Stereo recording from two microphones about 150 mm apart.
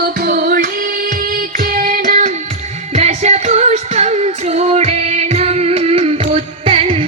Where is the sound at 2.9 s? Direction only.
50° right (ahead or behind).